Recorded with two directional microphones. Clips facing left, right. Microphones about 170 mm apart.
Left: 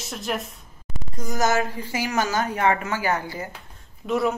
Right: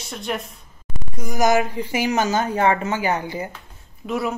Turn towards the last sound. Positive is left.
turn(degrees=0)  # may be behind; listen again after turning